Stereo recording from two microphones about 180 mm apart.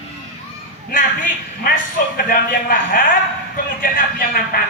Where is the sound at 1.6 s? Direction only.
50° left (ahead or behind).